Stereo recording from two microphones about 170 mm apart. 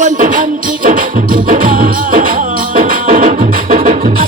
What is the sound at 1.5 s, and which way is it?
Music, 55° right (ahead or behind).